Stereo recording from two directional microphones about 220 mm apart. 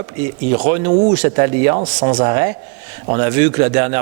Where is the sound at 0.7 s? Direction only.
10° right (ahead or behind).